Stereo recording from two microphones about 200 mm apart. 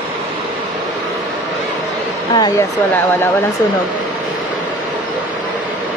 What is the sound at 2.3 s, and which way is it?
Speech, 15° left (ahead or behind).